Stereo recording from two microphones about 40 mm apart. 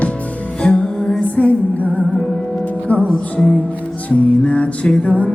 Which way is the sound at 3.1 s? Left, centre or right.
Centre.